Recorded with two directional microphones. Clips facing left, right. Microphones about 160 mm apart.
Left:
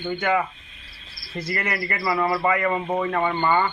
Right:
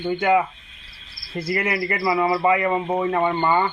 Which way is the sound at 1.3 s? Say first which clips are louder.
Right 4 dB; 10° right (ahead or behind).